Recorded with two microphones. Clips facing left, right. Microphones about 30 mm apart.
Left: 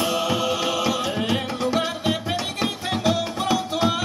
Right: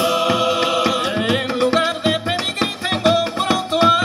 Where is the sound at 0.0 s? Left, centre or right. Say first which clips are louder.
Right 6 dB; right.